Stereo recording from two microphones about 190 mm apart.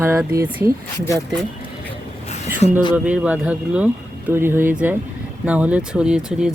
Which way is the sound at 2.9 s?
5° right (ahead or behind).